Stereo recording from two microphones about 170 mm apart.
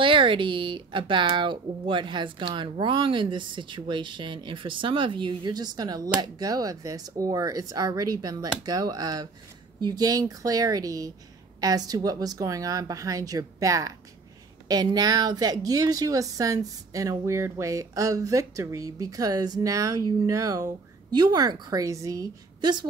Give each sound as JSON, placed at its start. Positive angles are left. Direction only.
{"t": 0.0, "sound": "speech", "side_deg": -30}